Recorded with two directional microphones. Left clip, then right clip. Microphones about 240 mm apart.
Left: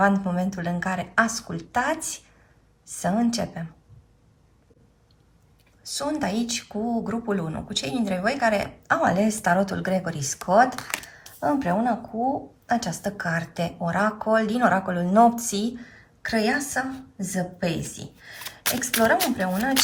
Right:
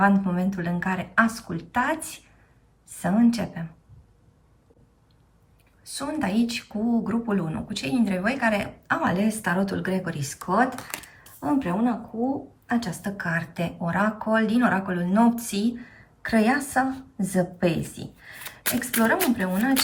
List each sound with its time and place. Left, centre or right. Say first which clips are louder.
0.0 s a woman's voice: even; centre
5.8 s a woman's voice: left 2 dB; centre
10.8 s a woman's voice: left 5 dB; centre
12.6 s a woman's voice: left 3 dB; centre
15.8 s a woman's voice: left 1 dB; centre